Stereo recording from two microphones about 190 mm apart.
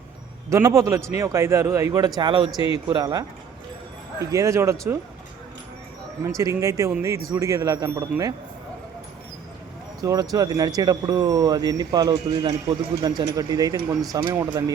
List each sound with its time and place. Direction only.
0.5 s a man's voice: 15° right (ahead or behind)
6.2 s a man's voice: 15° right (ahead or behind)
10.0 s speech: 20° right (ahead or behind)